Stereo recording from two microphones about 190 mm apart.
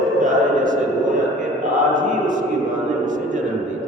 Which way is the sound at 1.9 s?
40° right (ahead or behind).